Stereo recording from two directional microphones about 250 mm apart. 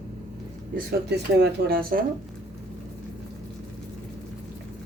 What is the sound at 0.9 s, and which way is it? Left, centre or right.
Speech, right.